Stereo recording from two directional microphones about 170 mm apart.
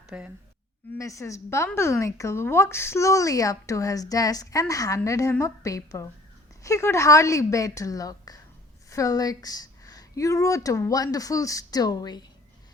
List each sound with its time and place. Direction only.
0.1 s speech: 10° right (ahead or behind)
0.9 s a woman's voice: 20° left (ahead or behind)